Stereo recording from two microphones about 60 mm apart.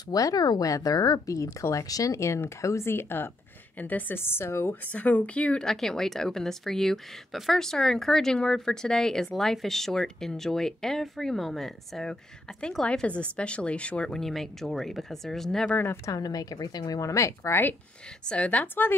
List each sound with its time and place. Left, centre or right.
0.1 s speech: left
2.1 s speech: left
3.7 s a woman's voice: left
4.8 s speech: left; by 15.7 s centre
16.1 s a woman's voice: left
18.2 s a woman's voice: centre